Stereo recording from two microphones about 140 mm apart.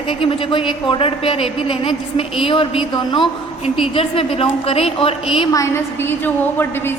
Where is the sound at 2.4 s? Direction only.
40° left (ahead or behind).